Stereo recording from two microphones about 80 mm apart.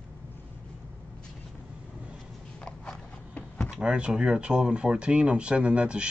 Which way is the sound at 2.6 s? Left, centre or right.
Centre.